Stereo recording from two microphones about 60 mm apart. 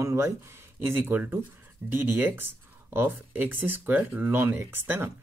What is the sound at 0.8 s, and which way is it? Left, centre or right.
Speech, right.